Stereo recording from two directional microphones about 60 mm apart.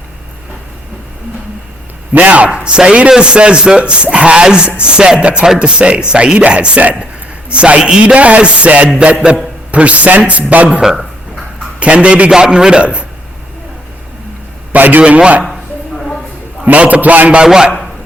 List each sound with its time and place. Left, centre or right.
2.1 s music: right
2.6 s speech: centre
7.5 s music: centre
10.5 s speech: centre
11.8 s music: centre
12.3 s speech: centre
14.7 s a man's voice: right
15.0 s music: right
16.0 s a sound: centre
16.6 s music: right